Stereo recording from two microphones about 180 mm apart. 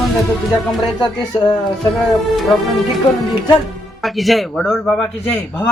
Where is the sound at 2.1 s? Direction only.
Centre (ahead or behind).